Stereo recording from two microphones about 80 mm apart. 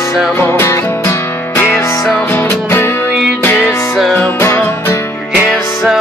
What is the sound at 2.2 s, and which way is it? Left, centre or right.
Music, left.